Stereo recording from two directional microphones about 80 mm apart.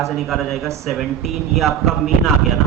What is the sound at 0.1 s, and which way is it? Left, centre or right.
Speech, centre.